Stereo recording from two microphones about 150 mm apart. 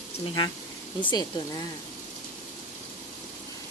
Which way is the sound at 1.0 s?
25° left (ahead or behind).